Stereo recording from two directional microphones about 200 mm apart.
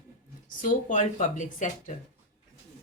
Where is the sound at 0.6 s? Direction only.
40° left (ahead or behind).